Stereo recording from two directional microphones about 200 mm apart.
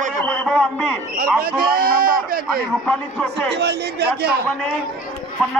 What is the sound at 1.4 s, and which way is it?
Speech, 50° right (ahead or behind).